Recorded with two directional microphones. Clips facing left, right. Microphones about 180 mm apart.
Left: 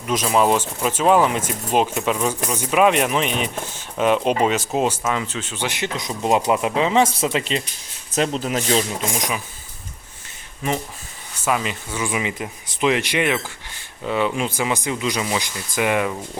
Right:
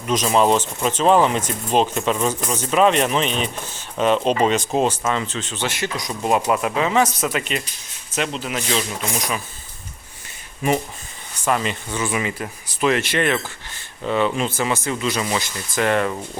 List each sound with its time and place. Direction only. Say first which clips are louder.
0.3 s speech: even; 10° left (ahead or behind); by 7.6 s 25° left (ahead or behind)
8.1 s speech: left 3 dB; 40° left (ahead or behind)
9.0 s speech: even; 15° left (ahead or behind)
11.4 s speech: right 1 dB; 5° left (ahead or behind)